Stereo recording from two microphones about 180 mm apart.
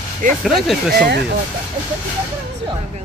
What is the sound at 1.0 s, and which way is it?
Speech, 65° right (ahead or behind).